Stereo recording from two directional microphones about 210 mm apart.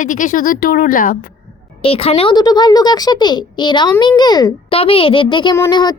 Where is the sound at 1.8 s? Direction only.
25° left (ahead or behind).